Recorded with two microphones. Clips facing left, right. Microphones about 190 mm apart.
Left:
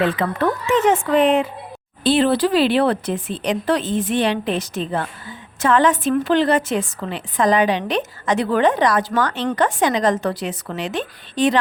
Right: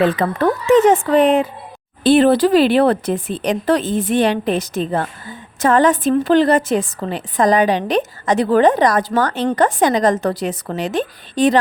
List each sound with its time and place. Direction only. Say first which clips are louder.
0.0 s a woman's voice: right 3 dB; 40° right (ahead or behind)